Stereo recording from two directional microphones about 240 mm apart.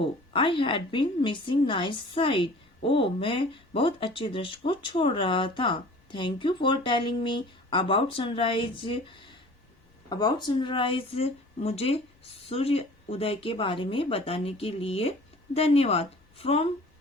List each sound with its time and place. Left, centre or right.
0.0 s a woman's voice: left